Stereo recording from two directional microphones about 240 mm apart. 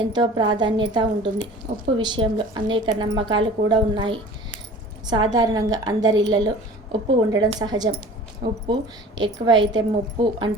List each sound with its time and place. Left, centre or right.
0.1 s a woman's voice: centre